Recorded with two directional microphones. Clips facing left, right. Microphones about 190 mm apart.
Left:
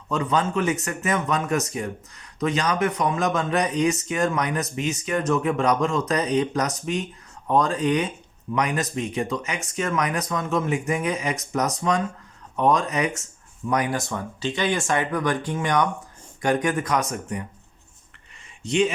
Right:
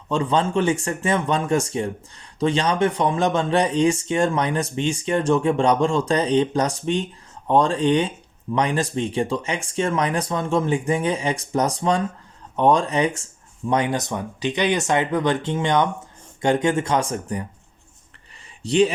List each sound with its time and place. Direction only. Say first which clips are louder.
0.1 s speech: right 3 dB; 30° right (ahead or behind)
18.6 s speech: right 4 dB; 35° right (ahead or behind)